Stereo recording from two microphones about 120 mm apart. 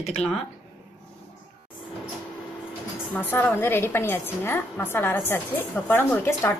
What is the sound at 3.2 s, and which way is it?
A woman's voice, 15° left (ahead or behind).